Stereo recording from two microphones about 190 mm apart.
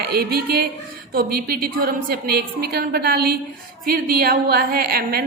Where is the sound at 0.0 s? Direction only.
55° right (ahead or behind).